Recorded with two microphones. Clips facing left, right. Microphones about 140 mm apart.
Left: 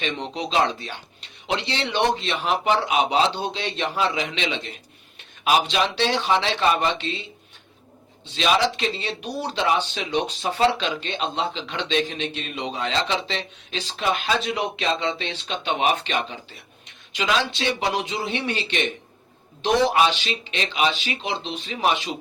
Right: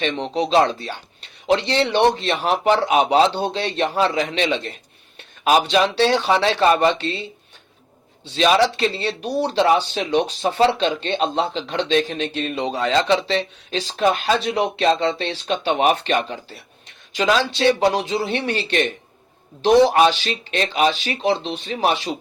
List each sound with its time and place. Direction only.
0.0 s speech: 35° right (ahead or behind)
5.7 s speech: 40° right (ahead or behind)
8.2 s speech: 35° right (ahead or behind)